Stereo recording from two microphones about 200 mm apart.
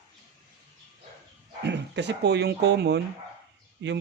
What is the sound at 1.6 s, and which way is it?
Speech, 60° right (ahead or behind).